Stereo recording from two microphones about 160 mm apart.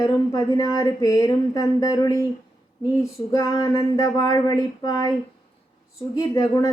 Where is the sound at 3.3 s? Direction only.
25° left (ahead or behind).